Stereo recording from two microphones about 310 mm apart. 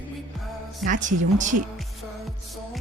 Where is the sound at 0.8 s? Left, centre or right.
Right.